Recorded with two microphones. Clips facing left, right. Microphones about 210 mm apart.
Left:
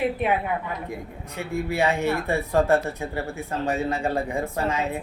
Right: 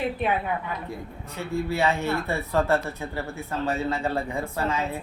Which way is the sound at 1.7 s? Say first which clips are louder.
Left 3 dB; 15° left (ahead or behind).